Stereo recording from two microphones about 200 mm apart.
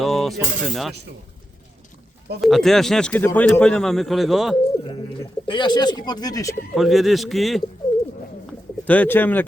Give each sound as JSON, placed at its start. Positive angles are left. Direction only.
{"t": 0.0, "sound": "speech", "side_deg": 0}
{"t": 2.4, "sound": "speech", "side_deg": 0}
{"t": 5.5, "sound": "speech", "side_deg": 20}
{"t": 6.7, "sound": "speech", "side_deg": 0}
{"t": 8.9, "sound": "speech", "side_deg": 10}